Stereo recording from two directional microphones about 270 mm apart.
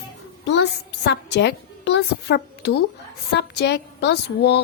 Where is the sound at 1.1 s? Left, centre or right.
Left.